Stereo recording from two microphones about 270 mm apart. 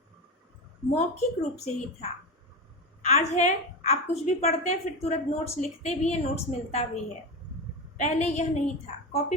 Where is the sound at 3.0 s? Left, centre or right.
Left.